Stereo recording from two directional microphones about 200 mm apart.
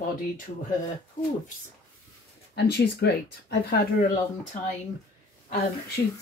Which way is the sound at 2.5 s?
55° left (ahead or behind).